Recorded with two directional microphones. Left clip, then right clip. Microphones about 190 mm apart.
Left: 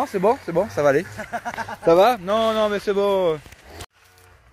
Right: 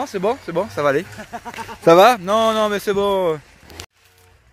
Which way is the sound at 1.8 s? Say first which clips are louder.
Right 5 dB; 60° right (ahead or behind).